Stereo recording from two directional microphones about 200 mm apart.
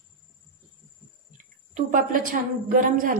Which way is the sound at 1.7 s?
40° right (ahead or behind).